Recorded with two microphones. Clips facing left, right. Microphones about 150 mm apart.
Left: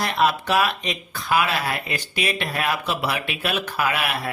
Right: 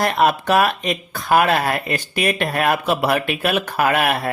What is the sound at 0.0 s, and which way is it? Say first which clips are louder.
Speech: right 4 dB; 50° right (ahead or behind).